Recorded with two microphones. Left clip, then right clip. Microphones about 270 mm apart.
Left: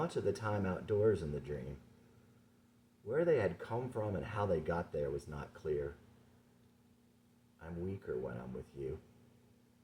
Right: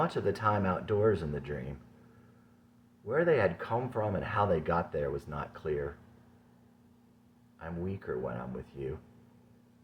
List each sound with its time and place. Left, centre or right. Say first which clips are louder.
0.0 s speech: right 7 dB; centre
3.1 s speech: right 5 dB; centre
7.6 s speech: right 5 dB; centre